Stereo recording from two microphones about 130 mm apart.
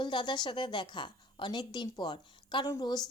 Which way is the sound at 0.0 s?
40° left (ahead or behind).